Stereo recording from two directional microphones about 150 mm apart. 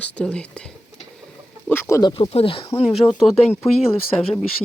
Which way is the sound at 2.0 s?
30° left (ahead or behind).